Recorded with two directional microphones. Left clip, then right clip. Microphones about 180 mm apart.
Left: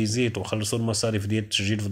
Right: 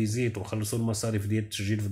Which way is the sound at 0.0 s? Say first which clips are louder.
Left 5 dB; 30° left (ahead or behind).